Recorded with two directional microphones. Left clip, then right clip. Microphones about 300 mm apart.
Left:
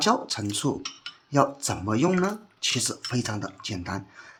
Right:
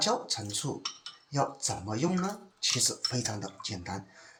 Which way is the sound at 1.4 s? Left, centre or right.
Centre.